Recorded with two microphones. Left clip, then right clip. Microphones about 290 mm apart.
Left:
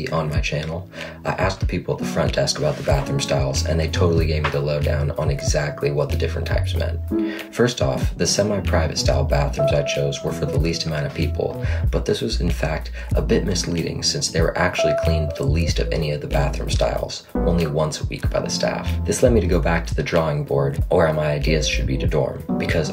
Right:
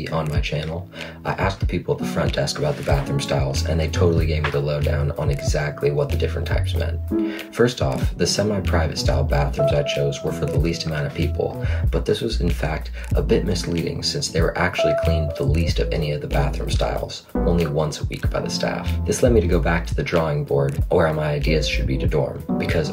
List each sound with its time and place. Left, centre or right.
0.1 s speech: centre
13.7 s speech: centre